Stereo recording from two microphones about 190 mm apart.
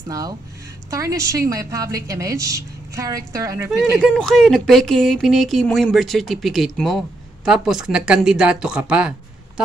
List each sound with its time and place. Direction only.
0.1 s a woman's voice: 20° right (ahead or behind)
4.0 s speech: 5° left (ahead or behind)